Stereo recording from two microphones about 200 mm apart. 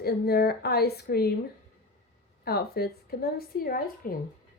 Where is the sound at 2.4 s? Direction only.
50° left (ahead or behind).